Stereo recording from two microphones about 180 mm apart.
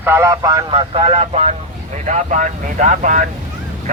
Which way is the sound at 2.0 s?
45° right (ahead or behind).